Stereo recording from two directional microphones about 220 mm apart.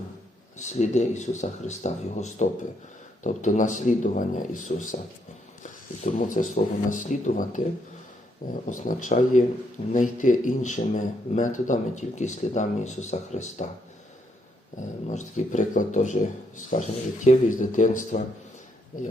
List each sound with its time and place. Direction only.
0.6 s speech: 30° left (ahead or behind)
8.6 s speech: 35° left (ahead or behind)
14.8 s speech: 35° left (ahead or behind)